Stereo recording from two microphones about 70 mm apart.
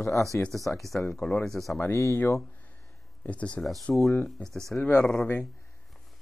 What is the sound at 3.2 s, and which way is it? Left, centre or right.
Speech, centre.